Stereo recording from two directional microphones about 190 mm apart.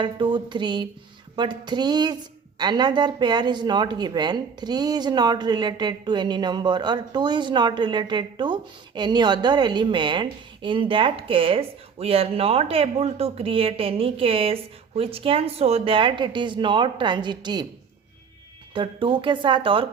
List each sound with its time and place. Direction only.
0.0 s a woman's voice: 25° right (ahead or behind)
18.7 s a woman's voice: 25° right (ahead or behind)